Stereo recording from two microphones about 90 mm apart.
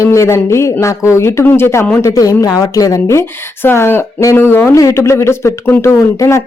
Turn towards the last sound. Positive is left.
turn(degrees=30)  # may be behind; listen again after turning